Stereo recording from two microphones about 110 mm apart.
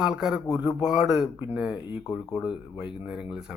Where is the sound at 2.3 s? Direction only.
5° right (ahead or behind).